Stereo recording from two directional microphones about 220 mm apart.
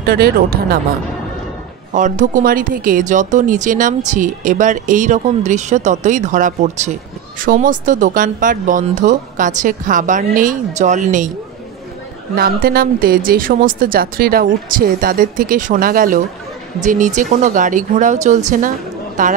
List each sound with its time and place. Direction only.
0.0 s speech: 45° right (ahead or behind)
2.0 s speech: 35° right (ahead or behind)
12.4 s speech: 40° right (ahead or behind)